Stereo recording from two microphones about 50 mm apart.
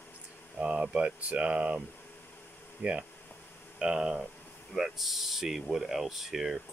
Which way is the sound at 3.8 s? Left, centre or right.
Centre.